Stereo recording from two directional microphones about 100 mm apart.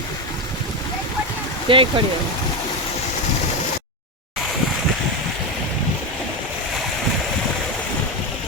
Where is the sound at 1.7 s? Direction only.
65° right (ahead or behind).